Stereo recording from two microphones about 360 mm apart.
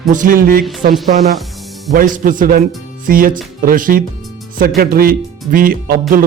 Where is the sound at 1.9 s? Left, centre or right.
Right.